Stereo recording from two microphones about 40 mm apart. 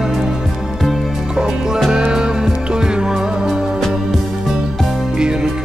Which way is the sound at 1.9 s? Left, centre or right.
Centre.